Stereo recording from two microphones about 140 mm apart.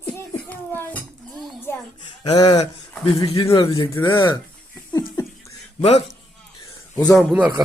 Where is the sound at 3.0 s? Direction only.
35° left (ahead or behind).